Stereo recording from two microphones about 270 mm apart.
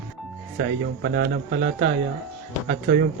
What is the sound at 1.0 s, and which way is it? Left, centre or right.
Speech, right.